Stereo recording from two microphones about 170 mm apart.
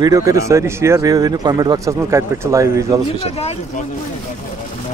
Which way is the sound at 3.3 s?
40° left (ahead or behind).